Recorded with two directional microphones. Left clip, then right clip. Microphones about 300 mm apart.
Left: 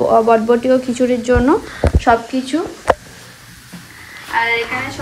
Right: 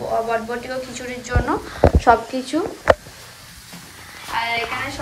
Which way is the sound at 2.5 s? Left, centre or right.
Centre.